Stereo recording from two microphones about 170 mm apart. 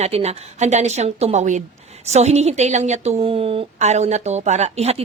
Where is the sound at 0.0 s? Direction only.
40° right (ahead or behind).